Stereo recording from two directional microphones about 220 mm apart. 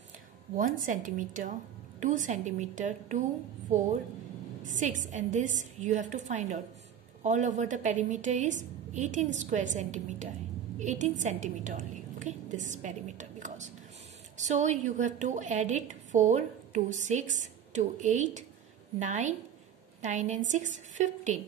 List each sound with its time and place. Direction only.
0.6 s a woman's voice: 35° right (ahead or behind)